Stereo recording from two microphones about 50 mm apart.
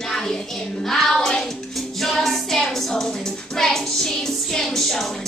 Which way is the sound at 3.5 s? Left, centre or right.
Centre.